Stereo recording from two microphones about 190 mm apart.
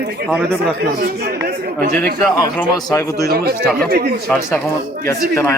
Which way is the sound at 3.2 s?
55° right (ahead or behind).